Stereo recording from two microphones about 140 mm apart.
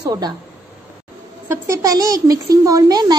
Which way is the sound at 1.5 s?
20° right (ahead or behind).